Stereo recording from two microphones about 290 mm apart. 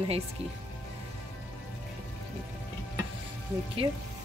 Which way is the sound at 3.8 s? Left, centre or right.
Centre.